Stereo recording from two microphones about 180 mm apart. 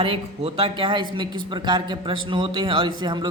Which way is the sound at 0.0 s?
30° right (ahead or behind).